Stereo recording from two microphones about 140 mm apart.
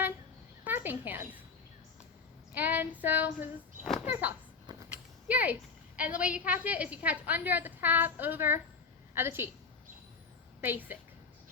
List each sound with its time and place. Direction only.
0.6 s speech: 15° right (ahead or behind)
2.6 s a woman's voice: 15° right (ahead or behind)
10.6 s a woman's voice: 15° right (ahead or behind)